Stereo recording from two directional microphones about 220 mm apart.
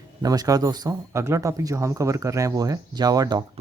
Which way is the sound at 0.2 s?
15° right (ahead or behind).